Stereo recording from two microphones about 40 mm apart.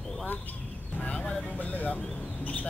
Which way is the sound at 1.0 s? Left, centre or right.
Left.